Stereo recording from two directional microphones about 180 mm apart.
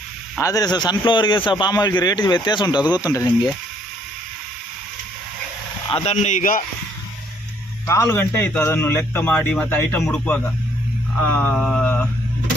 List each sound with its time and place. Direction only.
0.3 s speech: 20° left (ahead or behind)
5.9 s speech: 35° left (ahead or behind)
7.9 s a man's voice: 15° left (ahead or behind)